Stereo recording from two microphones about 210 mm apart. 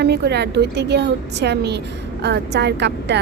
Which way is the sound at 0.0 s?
50° right (ahead or behind).